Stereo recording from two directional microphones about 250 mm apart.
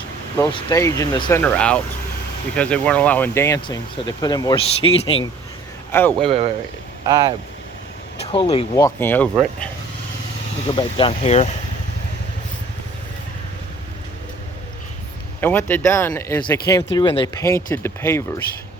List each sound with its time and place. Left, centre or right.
0.3 s speech: centre
5.9 s speech: centre
7.0 s speech: centre
8.2 s speech: left; by 9.6 s centre
10.8 s speech: left
15.4 s speech: centre